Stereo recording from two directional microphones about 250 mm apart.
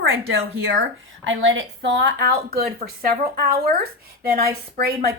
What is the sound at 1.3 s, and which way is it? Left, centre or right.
A woman's voice, right.